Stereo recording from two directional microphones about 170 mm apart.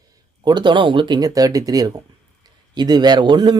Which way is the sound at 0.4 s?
25° right (ahead or behind).